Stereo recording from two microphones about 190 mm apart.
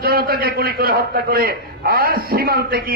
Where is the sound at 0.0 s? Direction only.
50° right (ahead or behind).